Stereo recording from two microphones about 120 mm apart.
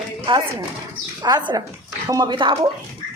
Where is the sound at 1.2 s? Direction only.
35° right (ahead or behind).